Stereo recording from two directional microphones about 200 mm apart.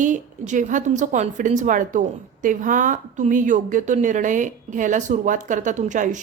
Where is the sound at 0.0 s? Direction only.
40° right (ahead or behind).